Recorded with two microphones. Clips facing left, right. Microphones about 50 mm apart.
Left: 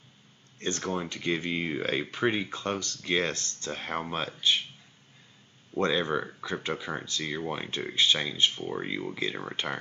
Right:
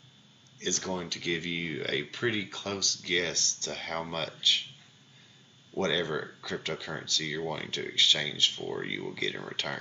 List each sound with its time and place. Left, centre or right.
0.6 s speech: left
5.8 s speech: left
8.6 s speech: centre